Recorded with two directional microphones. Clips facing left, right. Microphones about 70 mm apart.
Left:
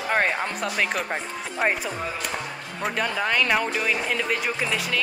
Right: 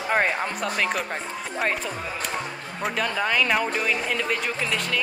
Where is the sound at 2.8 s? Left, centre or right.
Centre.